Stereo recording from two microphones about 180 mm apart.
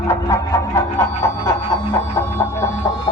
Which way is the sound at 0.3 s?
15° left (ahead or behind).